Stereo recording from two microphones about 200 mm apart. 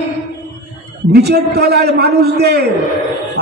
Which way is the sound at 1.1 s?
55° right (ahead or behind).